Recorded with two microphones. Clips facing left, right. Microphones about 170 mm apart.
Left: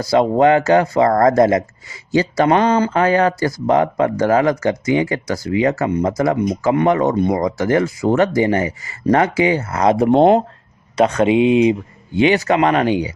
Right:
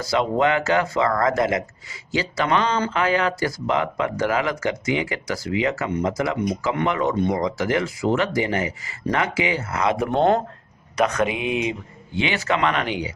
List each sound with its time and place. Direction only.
0.0 s speech: 35° left (ahead or behind)